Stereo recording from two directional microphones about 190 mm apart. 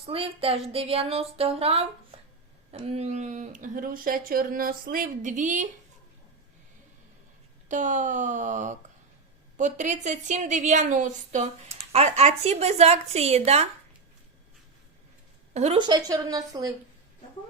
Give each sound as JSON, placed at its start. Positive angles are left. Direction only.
{"t": 0.0, "sound": "a woman's voice", "side_deg": -30}
{"t": 7.7, "sound": "a woman's voice", "side_deg": -40}
{"t": 15.5, "sound": "a woman's voice", "side_deg": -35}
{"t": 15.9, "sound": "a woman's voice", "side_deg": -20}